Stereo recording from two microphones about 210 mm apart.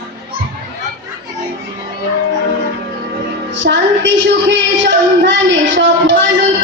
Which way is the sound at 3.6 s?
60° right (ahead or behind).